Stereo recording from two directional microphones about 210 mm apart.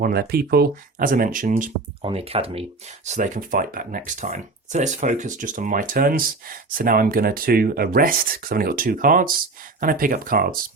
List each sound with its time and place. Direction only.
0.0 s speech: 50° right (ahead or behind)
2.0 s speech: 30° right (ahead or behind); by 10.6 s 45° right (ahead or behind)